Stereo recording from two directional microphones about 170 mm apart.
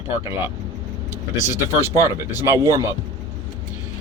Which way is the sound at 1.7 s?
15° right (ahead or behind).